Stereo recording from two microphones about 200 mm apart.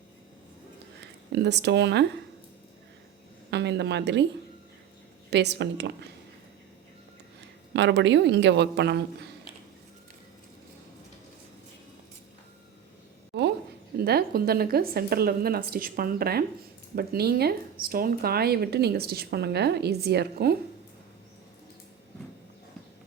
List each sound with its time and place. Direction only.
1.4 s speech: 60° right (ahead or behind)
3.5 s speech: 60° right (ahead or behind)
5.3 s speech: 60° right (ahead or behind)
7.7 s speech: 60° right (ahead or behind)
13.3 s a sound: 60° right (ahead or behind)
13.9 s speech: 50° right (ahead or behind)